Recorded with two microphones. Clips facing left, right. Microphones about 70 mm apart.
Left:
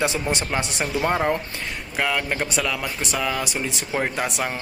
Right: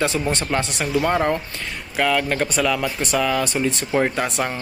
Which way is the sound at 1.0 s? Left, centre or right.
Centre.